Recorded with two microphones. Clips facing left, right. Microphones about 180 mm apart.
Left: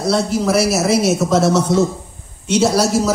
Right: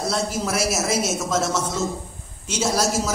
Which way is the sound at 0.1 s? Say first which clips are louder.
Left 8 dB; 65° left (ahead or behind).